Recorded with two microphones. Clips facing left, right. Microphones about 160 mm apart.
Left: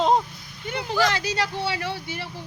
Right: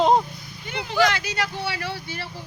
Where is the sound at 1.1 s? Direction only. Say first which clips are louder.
Left 2 dB; 30° left (ahead or behind).